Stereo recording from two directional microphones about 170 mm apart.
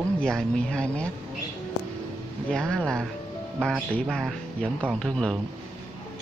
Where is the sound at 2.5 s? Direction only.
5° left (ahead or behind).